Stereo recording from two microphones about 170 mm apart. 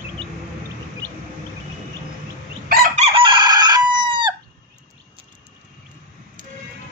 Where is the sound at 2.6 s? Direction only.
60° right (ahead or behind).